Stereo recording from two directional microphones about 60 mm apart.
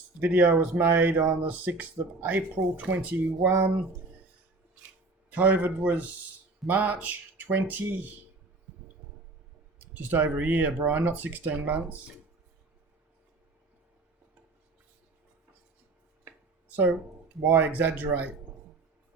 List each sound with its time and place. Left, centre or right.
0.2 s speech: right
0.8 s a sound: right
1.5 s speech: right
3.5 s a sound: right
5.3 s speech: right
9.9 s speech: right
17.4 s speech: right